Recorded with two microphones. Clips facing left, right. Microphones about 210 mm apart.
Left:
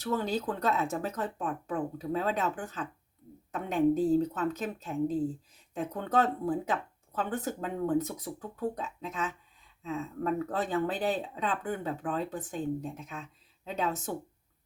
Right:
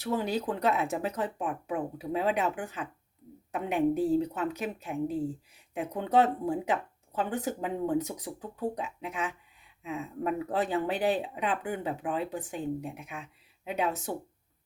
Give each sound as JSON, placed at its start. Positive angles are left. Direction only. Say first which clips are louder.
{"t": 0.0, "sound": "speech", "louder": "right 1 dB", "side_deg": -15}